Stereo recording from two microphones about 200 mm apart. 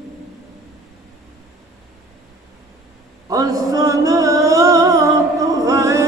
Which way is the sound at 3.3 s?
15° right (ahead or behind).